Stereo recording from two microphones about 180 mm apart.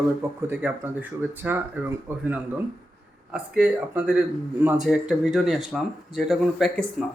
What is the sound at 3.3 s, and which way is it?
Speech, 5° right (ahead or behind).